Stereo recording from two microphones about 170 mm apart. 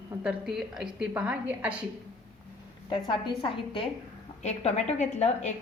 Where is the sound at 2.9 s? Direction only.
30° left (ahead or behind).